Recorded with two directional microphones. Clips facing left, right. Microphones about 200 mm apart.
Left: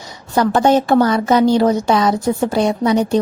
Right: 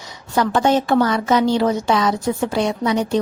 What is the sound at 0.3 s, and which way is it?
A woman's voice, 40° left (ahead or behind).